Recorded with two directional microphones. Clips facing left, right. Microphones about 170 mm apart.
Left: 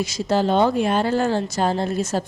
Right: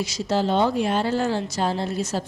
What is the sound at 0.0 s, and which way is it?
A woman's voice, 50° left (ahead or behind).